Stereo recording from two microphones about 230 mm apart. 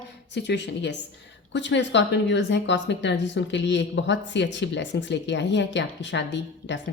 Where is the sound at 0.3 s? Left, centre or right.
Left.